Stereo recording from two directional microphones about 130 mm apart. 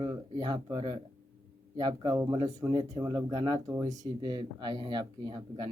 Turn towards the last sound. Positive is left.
turn(degrees=-35)  # may be behind; listen again after turning